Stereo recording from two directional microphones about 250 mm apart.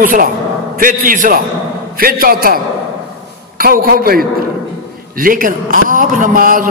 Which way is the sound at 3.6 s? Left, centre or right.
Right.